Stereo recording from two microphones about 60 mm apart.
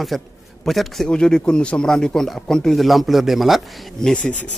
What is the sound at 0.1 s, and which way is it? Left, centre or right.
Speech, centre.